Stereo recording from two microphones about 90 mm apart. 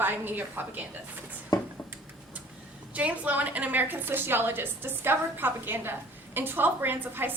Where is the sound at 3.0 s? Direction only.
15° right (ahead or behind).